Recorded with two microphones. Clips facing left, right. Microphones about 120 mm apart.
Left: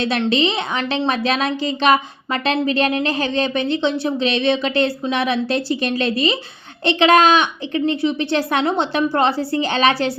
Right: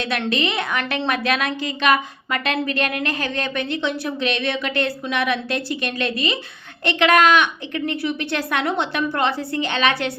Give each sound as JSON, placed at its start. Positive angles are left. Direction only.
{"t": 0.0, "sound": "a woman's voice", "side_deg": 30}